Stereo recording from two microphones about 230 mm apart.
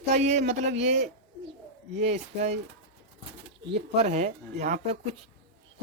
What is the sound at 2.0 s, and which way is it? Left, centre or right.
Speech, right.